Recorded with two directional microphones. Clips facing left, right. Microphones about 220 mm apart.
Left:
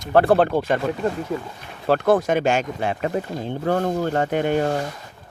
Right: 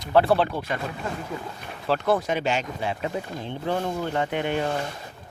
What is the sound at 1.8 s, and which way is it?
Speech, 50° left (ahead or behind).